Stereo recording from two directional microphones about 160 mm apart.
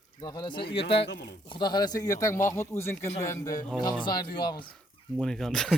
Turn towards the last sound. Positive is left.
turn(degrees=5)  # may be behind; listen again after turning